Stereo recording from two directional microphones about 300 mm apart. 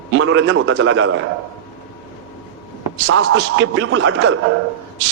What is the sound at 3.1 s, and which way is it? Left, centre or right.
A man's voice, right.